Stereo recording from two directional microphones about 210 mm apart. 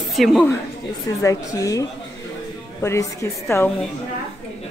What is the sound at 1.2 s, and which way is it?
Speech, 15° left (ahead or behind).